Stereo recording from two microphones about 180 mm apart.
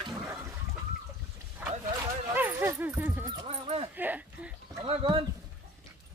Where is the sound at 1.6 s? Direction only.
10° right (ahead or behind).